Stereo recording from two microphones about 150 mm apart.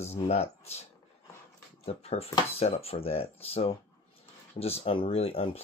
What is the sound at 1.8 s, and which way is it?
Speech, 40° left (ahead or behind).